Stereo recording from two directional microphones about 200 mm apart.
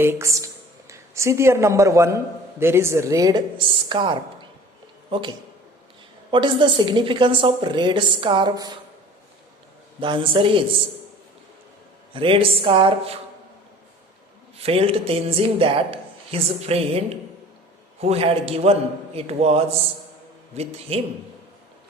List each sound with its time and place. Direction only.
0.0 s a woman's voice: 15° right (ahead or behind)
6.3 s a woman's voice: 25° right (ahead or behind)
10.0 s a woman's voice: 25° right (ahead or behind)
12.1 s a woman's voice: 25° right (ahead or behind)
14.6 s a woman's voice: 30° right (ahead or behind)
18.0 s a man's voice: 30° right (ahead or behind)